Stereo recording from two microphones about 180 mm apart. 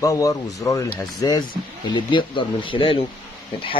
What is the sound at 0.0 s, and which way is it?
Speech, 20° left (ahead or behind).